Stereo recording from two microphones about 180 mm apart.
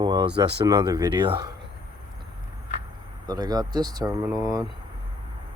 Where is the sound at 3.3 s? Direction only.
20° right (ahead or behind).